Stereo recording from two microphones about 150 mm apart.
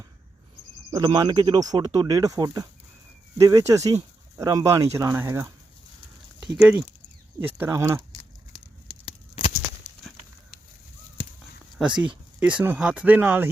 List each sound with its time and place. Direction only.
0.9 s speech: 30° right (ahead or behind)
6.6 s speech: 10° right (ahead or behind)
9.0 s a sound: 40° left (ahead or behind)
12.0 s speech: 10° right (ahead or behind)